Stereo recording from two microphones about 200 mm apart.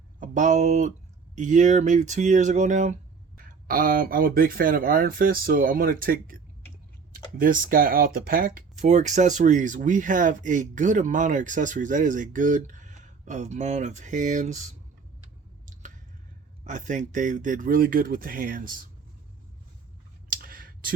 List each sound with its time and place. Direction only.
0.2 s speech: 40° right (ahead or behind)
15.6 s squish: 40° right (ahead or behind)
16.6 s speech: 40° right (ahead or behind)
20.3 s clicking: 45° right (ahead or behind)